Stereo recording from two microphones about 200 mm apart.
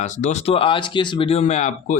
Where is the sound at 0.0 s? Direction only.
35° left (ahead or behind).